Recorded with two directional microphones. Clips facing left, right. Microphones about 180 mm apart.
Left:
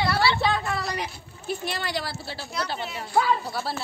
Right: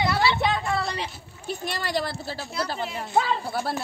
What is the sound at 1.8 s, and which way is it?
A woman's voice, 40° right (ahead or behind).